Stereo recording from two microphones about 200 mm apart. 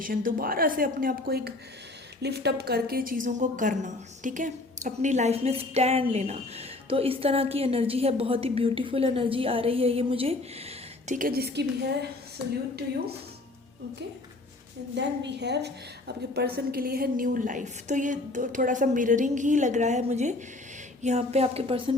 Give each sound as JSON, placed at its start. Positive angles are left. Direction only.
{"t": 0.0, "sound": "a woman's voice", "side_deg": -45}
{"t": 11.0, "sound": "a woman's voice", "side_deg": -40}
{"t": 14.9, "sound": "a woman's voice", "side_deg": -60}